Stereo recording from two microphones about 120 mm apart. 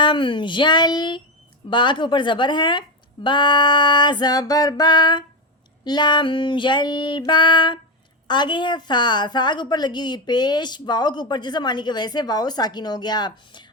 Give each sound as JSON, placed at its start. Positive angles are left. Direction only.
{"t": 0.0, "sound": "a woman's voice", "side_deg": 45}